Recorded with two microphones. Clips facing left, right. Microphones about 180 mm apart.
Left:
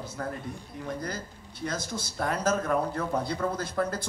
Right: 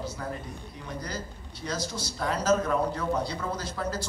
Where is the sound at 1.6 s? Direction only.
55° left (ahead or behind).